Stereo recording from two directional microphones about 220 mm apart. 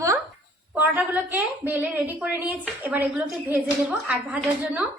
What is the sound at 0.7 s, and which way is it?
A woman's voice, 10° right (ahead or behind).